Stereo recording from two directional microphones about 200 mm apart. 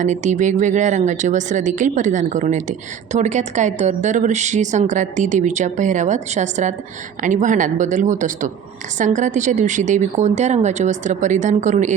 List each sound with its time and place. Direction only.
0.0 s speech: 35° right (ahead or behind)